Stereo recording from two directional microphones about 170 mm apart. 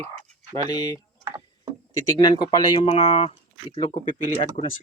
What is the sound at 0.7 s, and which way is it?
Speech, 20° left (ahead or behind).